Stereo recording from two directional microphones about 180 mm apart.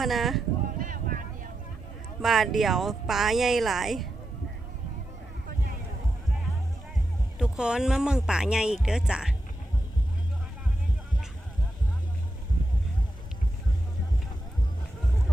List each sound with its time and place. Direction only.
0.0 s speech: centre (ahead or behind)
0.8 s vehicle: 50° right (ahead or behind)
2.2 s speech: centre (ahead or behind)
7.3 s speech: 5° right (ahead or behind)